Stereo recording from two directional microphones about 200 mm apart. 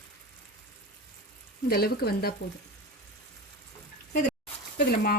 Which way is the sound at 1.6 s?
50° left (ahead or behind).